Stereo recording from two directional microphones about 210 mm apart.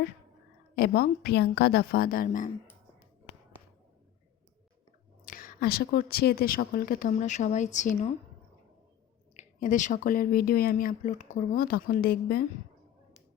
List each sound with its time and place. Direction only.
0.8 s speech: 50° left (ahead or behind)
5.2 s speech: 40° left (ahead or behind)
9.3 s speech: 35° left (ahead or behind)